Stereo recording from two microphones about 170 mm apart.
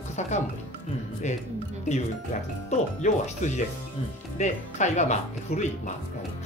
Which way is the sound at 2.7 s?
40° left (ahead or behind).